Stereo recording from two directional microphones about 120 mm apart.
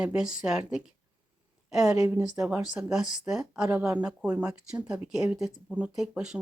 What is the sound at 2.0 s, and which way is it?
Speech, 20° right (ahead or behind).